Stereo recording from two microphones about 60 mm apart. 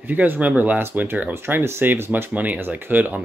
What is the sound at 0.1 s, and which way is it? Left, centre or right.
Speech, right.